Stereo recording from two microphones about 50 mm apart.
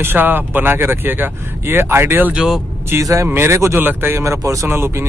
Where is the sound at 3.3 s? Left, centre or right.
Right.